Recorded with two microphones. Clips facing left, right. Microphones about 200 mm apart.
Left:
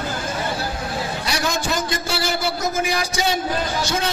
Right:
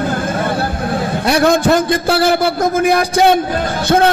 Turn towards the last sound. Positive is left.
turn(degrees=-55)  # may be behind; listen again after turning